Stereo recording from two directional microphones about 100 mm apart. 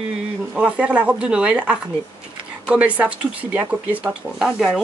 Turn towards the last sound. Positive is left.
turn(degrees=0)  # may be behind; listen again after turning